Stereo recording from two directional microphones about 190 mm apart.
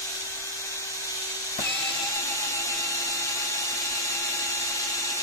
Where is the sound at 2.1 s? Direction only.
15° left (ahead or behind).